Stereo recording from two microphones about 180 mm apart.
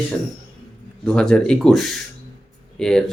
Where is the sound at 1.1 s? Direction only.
5° left (ahead or behind).